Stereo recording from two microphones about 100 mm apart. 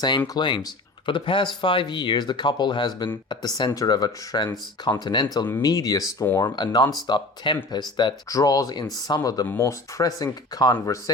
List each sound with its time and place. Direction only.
0.3 s speech: 50° left (ahead or behind)
8.3 s speech: 35° left (ahead or behind)